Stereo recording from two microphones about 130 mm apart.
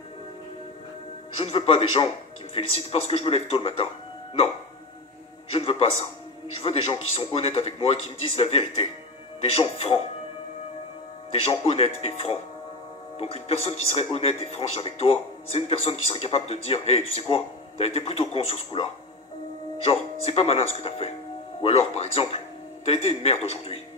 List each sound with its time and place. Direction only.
1.4 s a man's voice: 50° left (ahead or behind)
5.5 s a man's voice: 50° left (ahead or behind)
11.6 s a man's voice: 50° left (ahead or behind)